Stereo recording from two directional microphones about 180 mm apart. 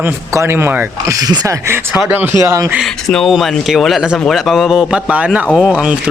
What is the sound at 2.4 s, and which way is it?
Speech, 15° right (ahead or behind).